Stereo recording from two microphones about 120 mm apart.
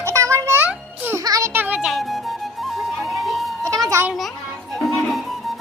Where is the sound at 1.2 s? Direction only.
30° right (ahead or behind).